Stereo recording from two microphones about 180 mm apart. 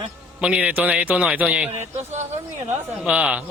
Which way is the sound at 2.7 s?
5° right (ahead or behind).